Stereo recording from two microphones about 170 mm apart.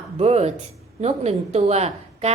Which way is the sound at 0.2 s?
40° right (ahead or behind).